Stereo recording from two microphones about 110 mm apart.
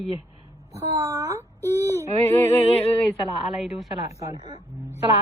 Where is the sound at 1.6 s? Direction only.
25° left (ahead or behind).